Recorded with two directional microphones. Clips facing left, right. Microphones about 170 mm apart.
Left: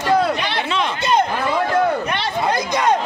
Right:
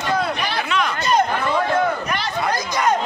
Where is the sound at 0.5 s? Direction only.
25° left (ahead or behind).